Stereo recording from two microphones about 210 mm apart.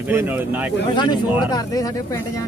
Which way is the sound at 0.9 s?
20° left (ahead or behind).